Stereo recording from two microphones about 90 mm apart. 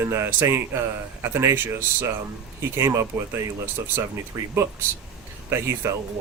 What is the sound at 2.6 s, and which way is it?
Speech, 30° right (ahead or behind).